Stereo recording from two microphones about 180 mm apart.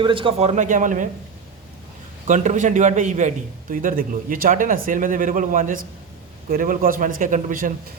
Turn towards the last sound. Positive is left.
turn(degrees=-50)  # may be behind; listen again after turning